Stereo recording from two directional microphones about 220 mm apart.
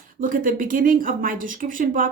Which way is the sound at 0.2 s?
40° right (ahead or behind).